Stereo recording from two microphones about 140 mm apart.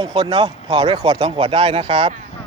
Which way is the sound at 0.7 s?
30° right (ahead or behind).